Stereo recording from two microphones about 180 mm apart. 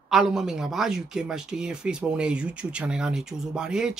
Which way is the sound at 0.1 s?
Centre (ahead or behind).